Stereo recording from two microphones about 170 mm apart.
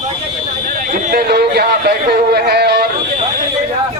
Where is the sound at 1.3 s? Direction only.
70° right (ahead or behind).